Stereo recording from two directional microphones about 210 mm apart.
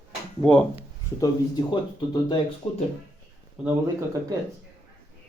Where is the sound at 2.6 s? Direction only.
30° left (ahead or behind).